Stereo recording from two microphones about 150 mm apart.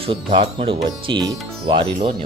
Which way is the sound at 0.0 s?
35° right (ahead or behind).